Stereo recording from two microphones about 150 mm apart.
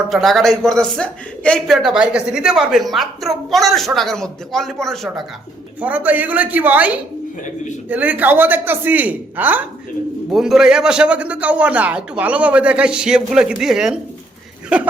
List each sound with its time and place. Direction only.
0.1 s a man's voice: centre (ahead or behind)
5.8 s a man's voice: 10° right (ahead or behind)